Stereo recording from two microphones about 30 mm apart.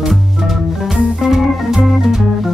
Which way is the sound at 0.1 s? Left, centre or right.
Centre.